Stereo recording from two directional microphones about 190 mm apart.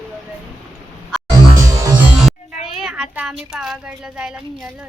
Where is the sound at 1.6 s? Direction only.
15° right (ahead or behind).